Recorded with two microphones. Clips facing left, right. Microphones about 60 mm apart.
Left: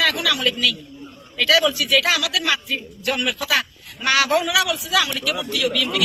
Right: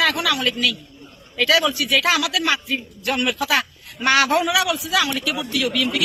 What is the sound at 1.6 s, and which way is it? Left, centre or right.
A man's voice, centre.